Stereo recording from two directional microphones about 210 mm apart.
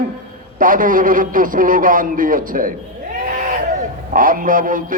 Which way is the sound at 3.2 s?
40° right (ahead or behind).